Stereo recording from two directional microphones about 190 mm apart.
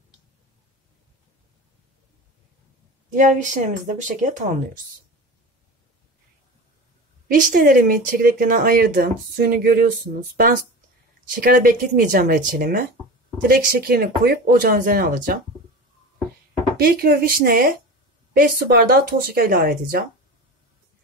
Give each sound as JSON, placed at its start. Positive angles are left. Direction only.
{"t": 3.2, "sound": "speech", "side_deg": -40}
{"t": 7.3, "sound": "speech", "side_deg": -45}
{"t": 16.7, "sound": "speech", "side_deg": -50}